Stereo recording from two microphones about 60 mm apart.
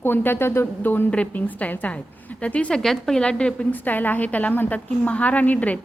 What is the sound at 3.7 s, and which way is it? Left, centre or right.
A woman's voice, left.